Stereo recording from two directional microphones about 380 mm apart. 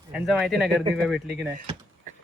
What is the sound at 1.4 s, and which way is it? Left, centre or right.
Speech, centre.